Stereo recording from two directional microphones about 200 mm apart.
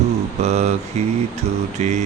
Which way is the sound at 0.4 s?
35° right (ahead or behind).